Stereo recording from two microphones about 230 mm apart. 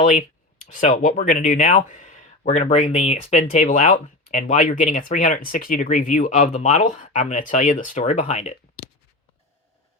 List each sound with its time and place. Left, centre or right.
0.0 s speech: left